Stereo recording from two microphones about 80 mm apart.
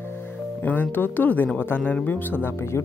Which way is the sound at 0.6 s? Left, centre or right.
Left.